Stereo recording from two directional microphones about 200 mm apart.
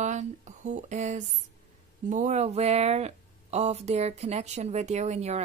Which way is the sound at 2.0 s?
35° right (ahead or behind).